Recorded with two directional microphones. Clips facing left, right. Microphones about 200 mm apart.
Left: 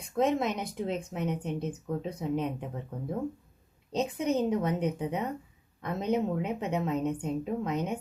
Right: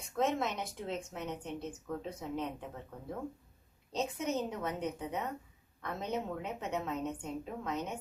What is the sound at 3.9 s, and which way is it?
A woman's voice, 15° left (ahead or behind).